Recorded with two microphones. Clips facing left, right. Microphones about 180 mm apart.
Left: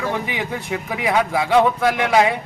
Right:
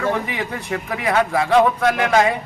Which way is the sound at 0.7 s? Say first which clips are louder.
Right 1 dB; 10° left (ahead or behind).